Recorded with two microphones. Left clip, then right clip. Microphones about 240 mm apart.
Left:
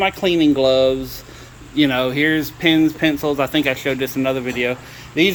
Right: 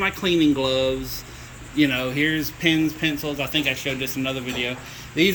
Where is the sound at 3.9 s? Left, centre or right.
Left.